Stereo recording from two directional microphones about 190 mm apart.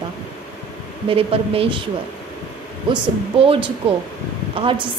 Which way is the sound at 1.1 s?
30° right (ahead or behind).